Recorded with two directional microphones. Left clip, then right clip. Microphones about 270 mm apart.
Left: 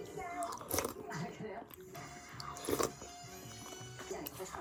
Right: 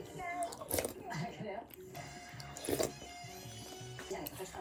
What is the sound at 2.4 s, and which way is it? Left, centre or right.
Power windows, centre.